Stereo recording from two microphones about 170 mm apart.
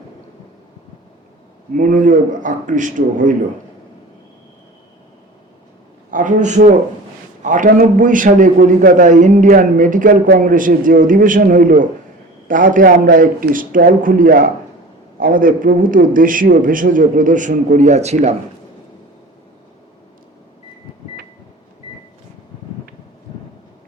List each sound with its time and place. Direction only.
1.7 s a man's voice: 50° right (ahead or behind)
6.1 s a man's voice: 50° right (ahead or behind)